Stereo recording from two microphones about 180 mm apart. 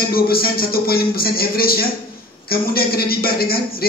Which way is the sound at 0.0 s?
55° left (ahead or behind).